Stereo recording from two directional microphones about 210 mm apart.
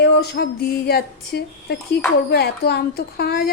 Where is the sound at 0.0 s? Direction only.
50° left (ahead or behind).